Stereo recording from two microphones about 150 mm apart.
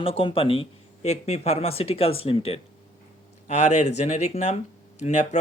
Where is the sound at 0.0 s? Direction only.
35° left (ahead or behind).